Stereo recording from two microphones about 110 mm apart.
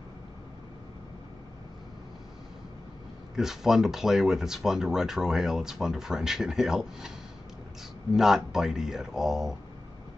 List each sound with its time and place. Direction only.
3.3 s speech: 5° right (ahead or behind)
8.1 s speech: 5° right (ahead or behind)